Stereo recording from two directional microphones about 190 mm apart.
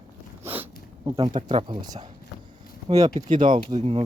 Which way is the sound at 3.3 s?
25° right (ahead or behind).